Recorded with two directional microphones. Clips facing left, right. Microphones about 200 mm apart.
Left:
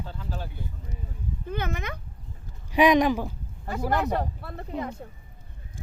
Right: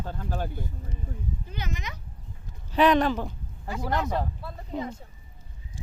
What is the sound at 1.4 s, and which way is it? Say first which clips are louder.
Speech: left 5 dB; 55° left (ahead or behind).